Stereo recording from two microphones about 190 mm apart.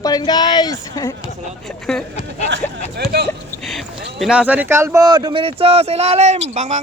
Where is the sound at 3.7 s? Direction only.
Centre (ahead or behind).